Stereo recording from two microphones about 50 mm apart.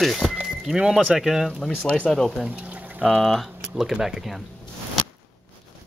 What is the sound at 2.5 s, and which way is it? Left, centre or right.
Pour, right.